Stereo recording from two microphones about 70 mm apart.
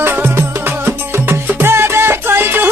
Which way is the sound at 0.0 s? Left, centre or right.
Right.